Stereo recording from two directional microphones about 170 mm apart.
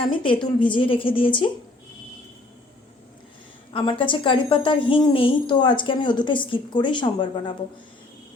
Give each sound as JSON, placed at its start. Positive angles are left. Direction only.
{"t": 0.0, "sound": "a woman's voice", "side_deg": 30}
{"t": 3.7, "sound": "a woman's voice", "side_deg": 30}